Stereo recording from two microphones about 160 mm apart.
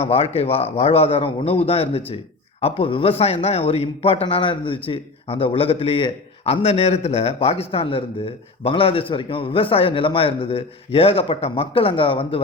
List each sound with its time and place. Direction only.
0.0 s a man's voice: 40° left (ahead or behind)